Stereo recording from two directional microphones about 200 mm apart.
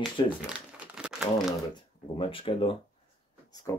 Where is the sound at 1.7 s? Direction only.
25° left (ahead or behind).